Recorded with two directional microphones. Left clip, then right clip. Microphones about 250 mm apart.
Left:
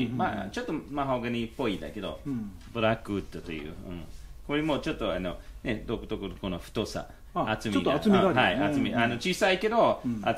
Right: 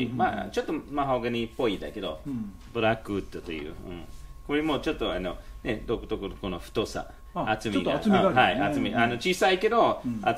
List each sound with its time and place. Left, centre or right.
0.0 s speech: centre